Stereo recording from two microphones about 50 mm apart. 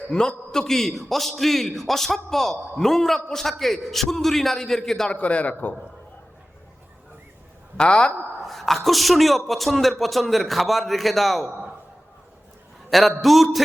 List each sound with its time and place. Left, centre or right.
0.1 s a man's voice: centre
5.0 s a man's voice: left
7.8 s a woman's voice: centre
8.4 s a man's voice: centre
12.9 s a man's voice: centre